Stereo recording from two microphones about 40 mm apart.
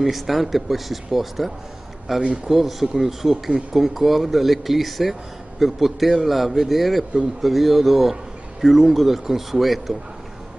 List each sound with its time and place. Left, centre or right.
0.0 s speech: centre
2.2 s a man's voice: right
2.5 s speech: centre